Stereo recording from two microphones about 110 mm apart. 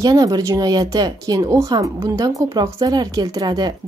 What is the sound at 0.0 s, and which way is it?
Speech, 35° right (ahead or behind).